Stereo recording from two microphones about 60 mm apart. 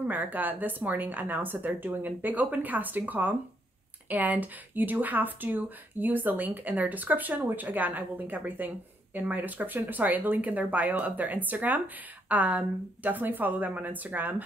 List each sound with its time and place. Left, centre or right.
0.1 s speech: right